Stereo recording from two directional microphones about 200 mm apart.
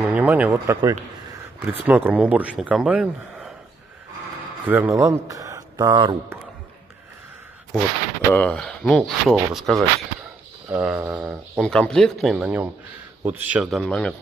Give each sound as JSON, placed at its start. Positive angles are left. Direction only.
{"t": 0.0, "sound": "a man's voice", "side_deg": -10}
{"t": 4.6, "sound": "speech", "side_deg": -10}
{"t": 8.3, "sound": "a man's voice", "side_deg": 5}
{"t": 11.6, "sound": "speech", "side_deg": 5}